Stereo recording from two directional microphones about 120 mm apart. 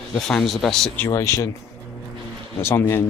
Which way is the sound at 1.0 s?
25° left (ahead or behind).